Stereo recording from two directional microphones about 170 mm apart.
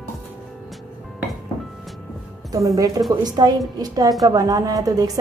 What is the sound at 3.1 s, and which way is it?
A woman's voice, 25° right (ahead or behind).